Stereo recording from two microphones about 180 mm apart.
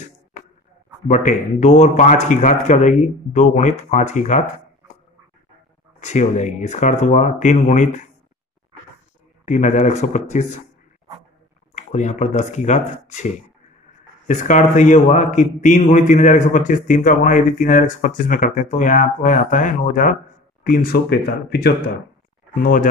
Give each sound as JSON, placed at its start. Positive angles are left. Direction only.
{"t": 1.0, "sound": "a man's voice", "side_deg": 45}
{"t": 5.9, "sound": "speech", "side_deg": 40}
{"t": 9.5, "sound": "speech", "side_deg": 40}
{"t": 11.7, "sound": "a man's voice", "side_deg": 40}
{"t": 22.5, "sound": "speech", "side_deg": 50}